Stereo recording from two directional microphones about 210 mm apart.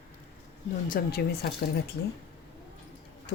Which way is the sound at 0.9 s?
45° left (ahead or behind).